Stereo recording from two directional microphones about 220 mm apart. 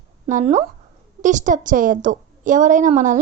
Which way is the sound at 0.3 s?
35° right (ahead or behind).